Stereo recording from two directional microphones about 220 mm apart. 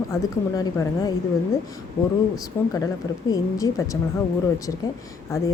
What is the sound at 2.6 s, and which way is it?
Speech, 10° left (ahead or behind).